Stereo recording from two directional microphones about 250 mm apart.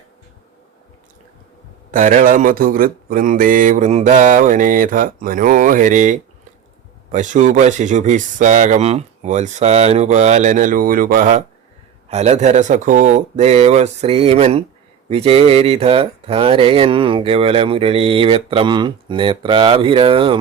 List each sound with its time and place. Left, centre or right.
1.9 s a man's voice: right